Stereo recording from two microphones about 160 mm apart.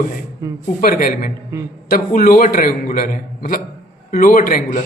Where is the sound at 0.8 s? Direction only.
65° left (ahead or behind).